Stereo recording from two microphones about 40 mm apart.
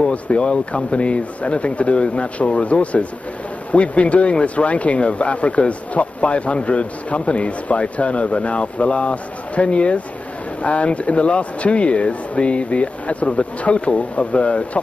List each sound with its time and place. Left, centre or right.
0.0 s speech: left